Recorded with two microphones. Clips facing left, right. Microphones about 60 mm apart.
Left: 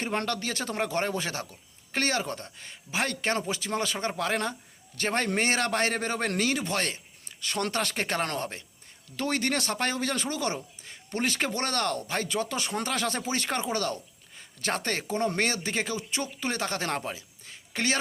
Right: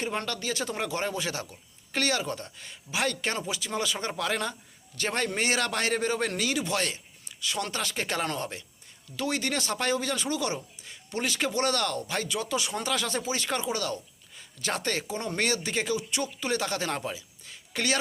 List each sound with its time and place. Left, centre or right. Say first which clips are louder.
0.0 s a man's voice: left 2 dB; left